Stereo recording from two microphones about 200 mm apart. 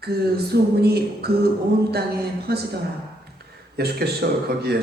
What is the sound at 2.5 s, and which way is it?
Speech, 50° right (ahead or behind).